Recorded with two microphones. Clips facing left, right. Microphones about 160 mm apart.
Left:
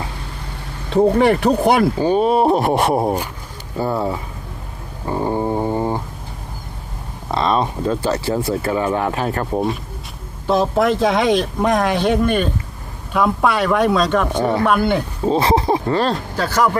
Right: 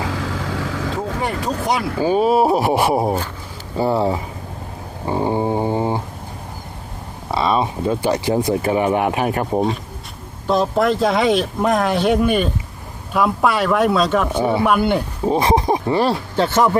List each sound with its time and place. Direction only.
0.0 s vehicle: 90° right
1.1 s speech: 75° left (ahead or behind)
2.0 s speech: 5° right (ahead or behind)
5.0 s a sound: 15° right (ahead or behind)
7.3 s speech: 5° right (ahead or behind)
10.4 s speech: centre (ahead or behind)
16.3 s speech: 25° right (ahead or behind)